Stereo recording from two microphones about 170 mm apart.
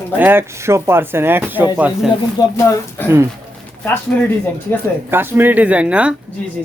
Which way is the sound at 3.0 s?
10° left (ahead or behind).